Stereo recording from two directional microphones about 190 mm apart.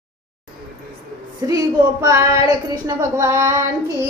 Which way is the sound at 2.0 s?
20° right (ahead or behind).